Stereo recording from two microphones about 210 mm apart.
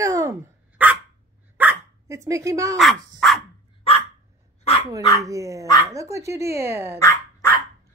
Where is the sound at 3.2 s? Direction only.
Centre (ahead or behind).